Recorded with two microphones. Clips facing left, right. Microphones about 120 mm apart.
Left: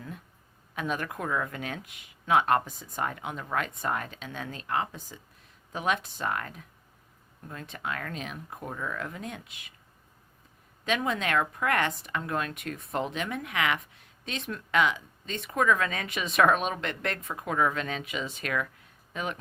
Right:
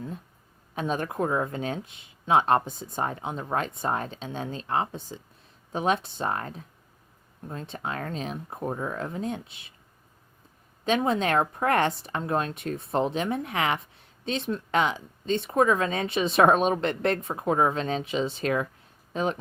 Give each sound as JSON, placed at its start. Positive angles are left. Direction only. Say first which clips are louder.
{"t": 0.8, "sound": "speech", "louder": "right 5 dB", "side_deg": -30}
{"t": 10.8, "sound": "speech", "louder": "right 5 dB", "side_deg": -35}